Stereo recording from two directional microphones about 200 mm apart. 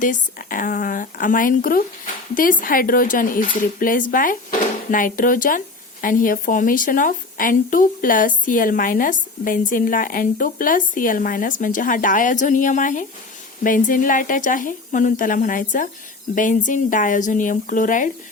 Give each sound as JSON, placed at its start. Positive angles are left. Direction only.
{"t": 0.0, "sound": "speech", "side_deg": 40}